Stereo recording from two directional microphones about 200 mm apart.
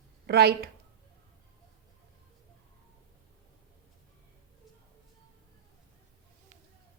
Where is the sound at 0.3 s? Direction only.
55° right (ahead or behind).